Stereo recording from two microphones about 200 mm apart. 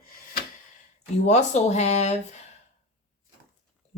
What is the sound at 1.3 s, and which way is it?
Speech, 35° left (ahead or behind).